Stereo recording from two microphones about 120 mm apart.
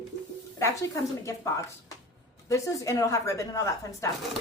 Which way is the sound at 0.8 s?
25° left (ahead or behind).